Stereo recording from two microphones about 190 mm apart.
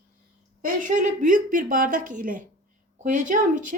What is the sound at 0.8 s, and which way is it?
A woman's voice, 40° right (ahead or behind).